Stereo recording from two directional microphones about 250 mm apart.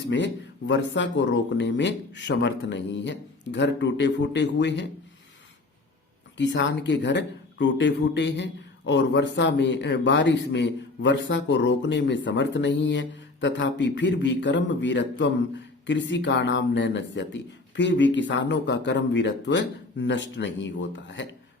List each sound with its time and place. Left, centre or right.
0.7 s speech: left
6.3 s speech: left